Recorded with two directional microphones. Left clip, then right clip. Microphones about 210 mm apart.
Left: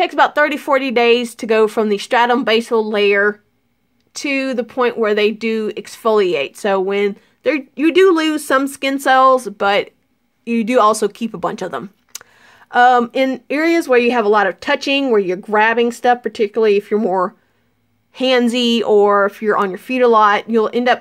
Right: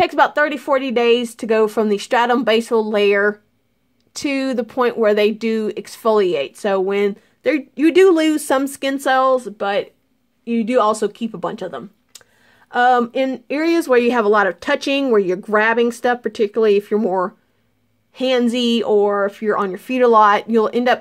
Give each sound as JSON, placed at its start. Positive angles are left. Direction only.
{"t": 0.0, "sound": "speech", "side_deg": -5}
{"t": 0.3, "sound": "speech", "side_deg": 5}
{"t": 12.6, "sound": "speech", "side_deg": 5}